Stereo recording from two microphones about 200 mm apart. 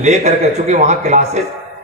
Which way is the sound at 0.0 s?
35° right (ahead or behind).